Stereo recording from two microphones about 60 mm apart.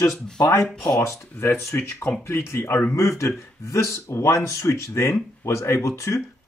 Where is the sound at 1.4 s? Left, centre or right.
Left.